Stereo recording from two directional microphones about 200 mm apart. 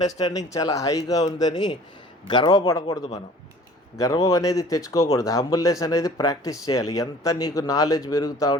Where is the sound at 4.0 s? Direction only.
15° left (ahead or behind).